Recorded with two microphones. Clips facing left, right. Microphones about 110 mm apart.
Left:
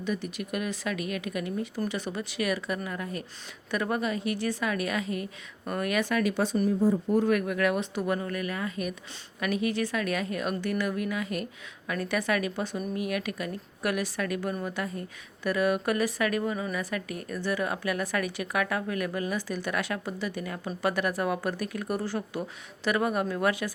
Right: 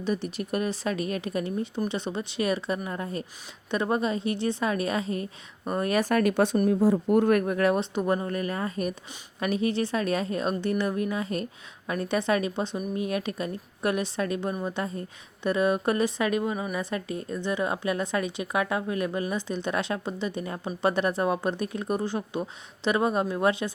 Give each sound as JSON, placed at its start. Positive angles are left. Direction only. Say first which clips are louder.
{"t": 0.0, "sound": "a woman's voice", "louder": "right 3 dB", "side_deg": -30}
{"t": 7.3, "sound": "a woman's voice", "louder": "right 3 dB", "side_deg": -40}